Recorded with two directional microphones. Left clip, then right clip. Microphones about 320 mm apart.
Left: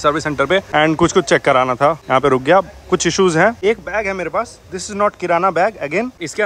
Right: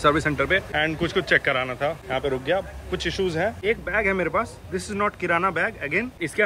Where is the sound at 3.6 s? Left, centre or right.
Centre.